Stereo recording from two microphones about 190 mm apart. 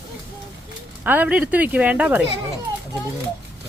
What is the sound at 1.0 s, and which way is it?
Speech, 10° right (ahead or behind).